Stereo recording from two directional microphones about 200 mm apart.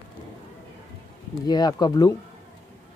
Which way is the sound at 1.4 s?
20° left (ahead or behind).